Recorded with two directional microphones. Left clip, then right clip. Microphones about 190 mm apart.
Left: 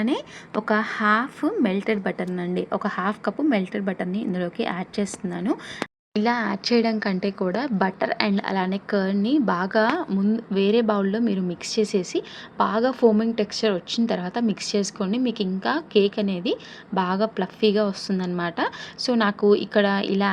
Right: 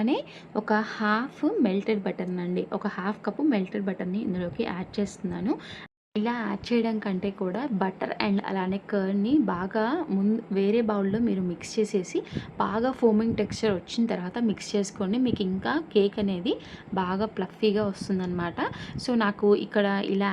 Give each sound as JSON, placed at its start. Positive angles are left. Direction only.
{"t": 0.0, "sound": "a woman's voice", "side_deg": 15}